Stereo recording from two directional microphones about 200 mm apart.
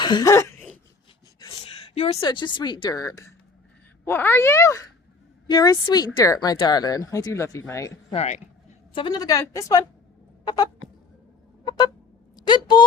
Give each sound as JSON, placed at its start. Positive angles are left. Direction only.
{"t": 0.0, "sound": "throat clearing", "side_deg": 20}
{"t": 1.5, "sound": "a woman's voice", "side_deg": 30}
{"t": 8.1, "sound": "speech", "side_deg": 30}
{"t": 9.0, "sound": "a woman's voice", "side_deg": 20}
{"t": 10.4, "sound": "a sound", "side_deg": 20}
{"t": 12.4, "sound": "speech", "side_deg": 20}